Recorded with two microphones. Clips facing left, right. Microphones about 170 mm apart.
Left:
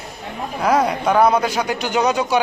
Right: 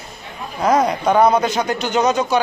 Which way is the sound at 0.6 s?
5° left (ahead or behind).